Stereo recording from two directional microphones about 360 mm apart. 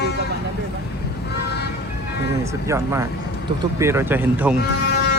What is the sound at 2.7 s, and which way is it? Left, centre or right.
Speech, centre.